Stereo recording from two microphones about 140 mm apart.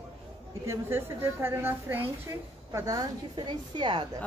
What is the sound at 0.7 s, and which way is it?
A woman's voice, 15° right (ahead or behind).